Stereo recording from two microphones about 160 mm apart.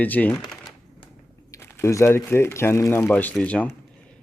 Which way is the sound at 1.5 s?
20° left (ahead or behind).